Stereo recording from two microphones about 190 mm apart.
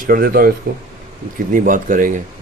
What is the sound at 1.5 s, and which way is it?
Speech, 45° right (ahead or behind).